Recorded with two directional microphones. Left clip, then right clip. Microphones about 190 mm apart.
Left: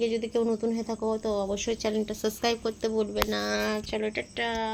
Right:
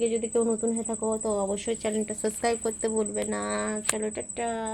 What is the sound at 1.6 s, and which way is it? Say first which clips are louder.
Speech: even; 20° left (ahead or behind).